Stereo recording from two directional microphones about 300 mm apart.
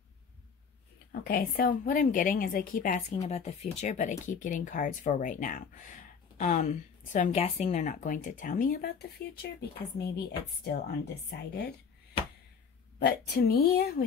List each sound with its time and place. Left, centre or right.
1.2 s a woman's voice: left
13.0 s a woman's voice: left